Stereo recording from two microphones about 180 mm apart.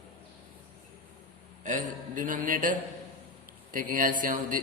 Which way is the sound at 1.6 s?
45° right (ahead or behind).